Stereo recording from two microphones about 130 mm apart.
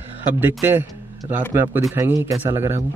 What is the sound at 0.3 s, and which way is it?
A man's voice, 15° right (ahead or behind).